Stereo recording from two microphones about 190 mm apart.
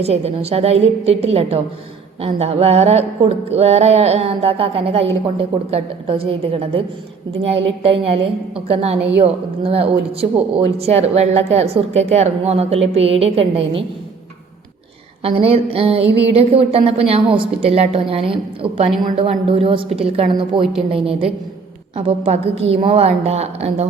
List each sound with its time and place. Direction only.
0.0 s a woman's voice: 35° right (ahead or behind)
15.2 s a woman's voice: 30° right (ahead or behind)